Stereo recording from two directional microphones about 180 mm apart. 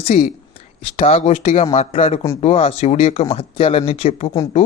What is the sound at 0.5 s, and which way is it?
Speech, 35° left (ahead or behind).